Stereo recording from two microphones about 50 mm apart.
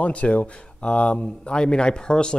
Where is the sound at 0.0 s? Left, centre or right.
Left.